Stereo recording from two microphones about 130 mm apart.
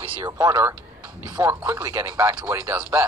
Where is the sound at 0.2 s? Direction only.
25° right (ahead or behind).